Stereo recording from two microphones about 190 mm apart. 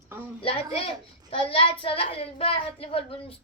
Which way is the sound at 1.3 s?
30° left (ahead or behind).